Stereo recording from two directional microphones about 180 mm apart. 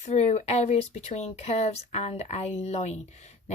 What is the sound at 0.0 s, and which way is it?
Speech, 40° left (ahead or behind).